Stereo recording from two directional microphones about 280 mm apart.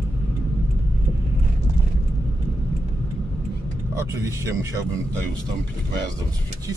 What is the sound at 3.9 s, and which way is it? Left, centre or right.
Speech, centre.